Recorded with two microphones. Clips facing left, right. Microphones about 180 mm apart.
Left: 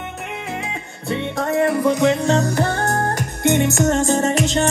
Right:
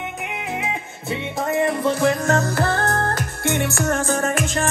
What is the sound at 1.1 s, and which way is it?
Music, centre (ahead or behind).